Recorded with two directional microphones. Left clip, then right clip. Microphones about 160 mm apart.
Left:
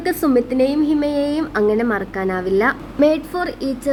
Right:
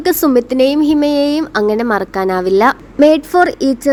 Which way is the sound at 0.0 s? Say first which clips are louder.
Right 5 dB; 35° right (ahead or behind).